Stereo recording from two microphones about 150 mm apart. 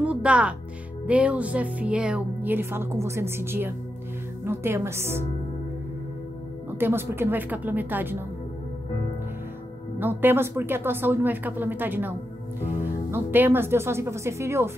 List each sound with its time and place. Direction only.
0.0 s music: 10° right (ahead or behind)
1.0 s speech: 10° right (ahead or behind)
6.7 s speech: 15° right (ahead or behind)
9.9 s speech: 15° right (ahead or behind)